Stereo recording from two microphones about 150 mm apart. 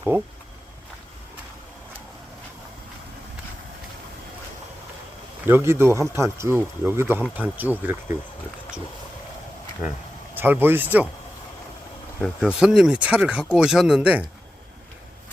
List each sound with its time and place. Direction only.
0.1 s speech: 15° right (ahead or behind)
5.5 s speech: 15° right (ahead or behind)
10.3 s speech: 15° right (ahead or behind)
12.2 s speech: centre (ahead or behind)